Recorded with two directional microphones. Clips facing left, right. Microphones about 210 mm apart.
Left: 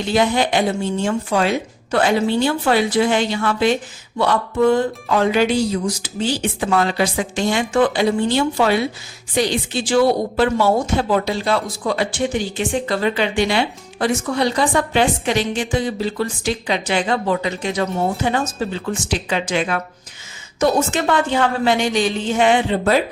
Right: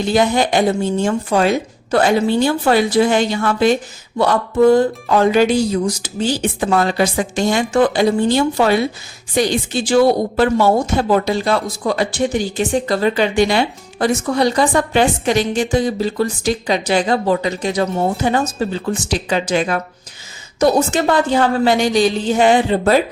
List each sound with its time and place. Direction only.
0.1 s a woman's voice: 45° right (ahead or behind)